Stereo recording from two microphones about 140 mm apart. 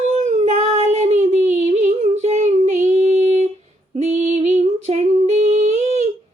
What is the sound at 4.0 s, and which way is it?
Female singing, 60° right (ahead or behind).